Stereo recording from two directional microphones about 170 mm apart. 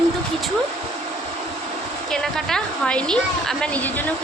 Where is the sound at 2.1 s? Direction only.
5° left (ahead or behind).